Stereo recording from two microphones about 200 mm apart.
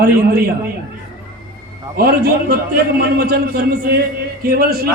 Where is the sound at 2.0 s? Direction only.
50° right (ahead or behind).